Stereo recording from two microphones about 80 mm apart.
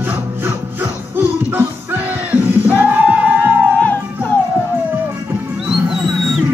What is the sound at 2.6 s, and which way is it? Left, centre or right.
Music, right.